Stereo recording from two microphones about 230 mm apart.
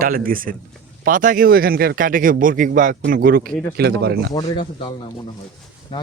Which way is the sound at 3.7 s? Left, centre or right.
Right.